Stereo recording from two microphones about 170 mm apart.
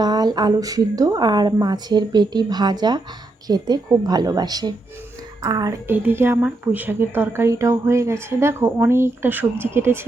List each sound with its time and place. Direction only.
0.0 s a woman's voice: 25° right (ahead or behind)
5.9 s a woman's voice: 10° right (ahead or behind)